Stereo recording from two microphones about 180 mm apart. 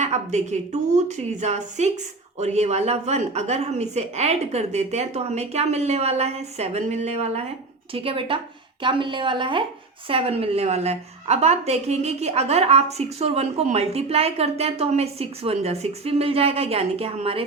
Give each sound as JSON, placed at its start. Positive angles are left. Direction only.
{"t": 0.0, "sound": "a woman's voice", "side_deg": -40}